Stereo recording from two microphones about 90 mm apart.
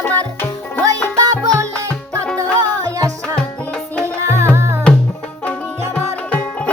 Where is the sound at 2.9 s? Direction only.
40° right (ahead or behind).